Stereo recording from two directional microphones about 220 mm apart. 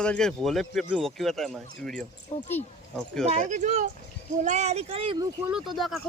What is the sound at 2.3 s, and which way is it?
Speech, 30° left (ahead or behind).